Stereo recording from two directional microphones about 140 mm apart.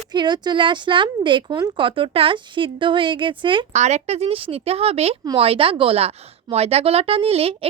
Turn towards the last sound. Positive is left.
turn(degrees=-45)  # may be behind; listen again after turning